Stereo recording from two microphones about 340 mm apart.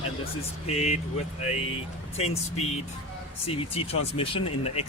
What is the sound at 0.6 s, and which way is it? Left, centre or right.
Speech, centre.